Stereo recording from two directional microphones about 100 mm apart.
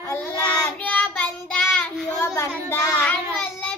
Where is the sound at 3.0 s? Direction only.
15° left (ahead or behind).